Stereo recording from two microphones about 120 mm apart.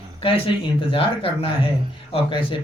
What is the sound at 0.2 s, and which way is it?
Speech, 50° left (ahead or behind).